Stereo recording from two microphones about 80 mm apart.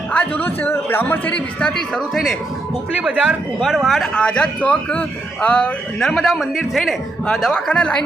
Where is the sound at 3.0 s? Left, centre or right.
Centre.